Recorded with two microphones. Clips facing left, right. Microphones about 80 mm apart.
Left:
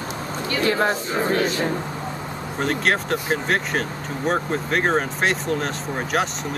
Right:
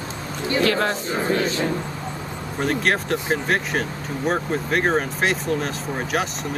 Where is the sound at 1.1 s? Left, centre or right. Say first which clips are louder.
Left 1 dB; left.